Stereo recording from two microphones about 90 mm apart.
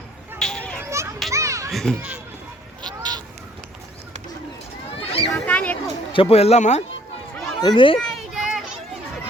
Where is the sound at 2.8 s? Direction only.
50° right (ahead or behind).